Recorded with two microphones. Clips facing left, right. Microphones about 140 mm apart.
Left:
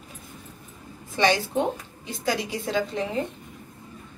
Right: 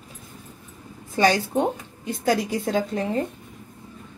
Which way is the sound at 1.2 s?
40° right (ahead or behind).